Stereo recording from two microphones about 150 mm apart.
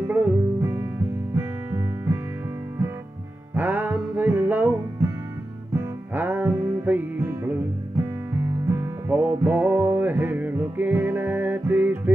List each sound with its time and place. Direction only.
0.1 s music: 15° right (ahead or behind)
3.5 s music: 10° right (ahead or behind)
5.8 s music: 10° right (ahead or behind)
8.6 s music: 15° right (ahead or behind)